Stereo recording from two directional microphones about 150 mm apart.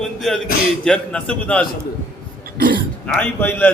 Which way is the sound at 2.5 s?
75° right (ahead or behind).